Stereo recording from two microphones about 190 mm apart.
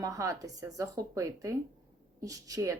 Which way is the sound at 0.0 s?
15° right (ahead or behind).